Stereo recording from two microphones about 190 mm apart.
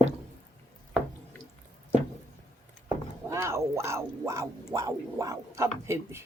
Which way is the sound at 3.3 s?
15° right (ahead or behind).